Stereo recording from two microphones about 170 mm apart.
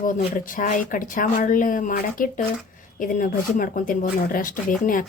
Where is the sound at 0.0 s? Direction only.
50° left (ahead or behind).